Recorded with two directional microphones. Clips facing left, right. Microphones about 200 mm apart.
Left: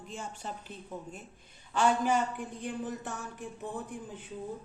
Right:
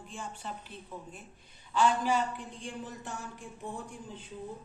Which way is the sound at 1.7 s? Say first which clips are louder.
Even; 50° left (ahead or behind).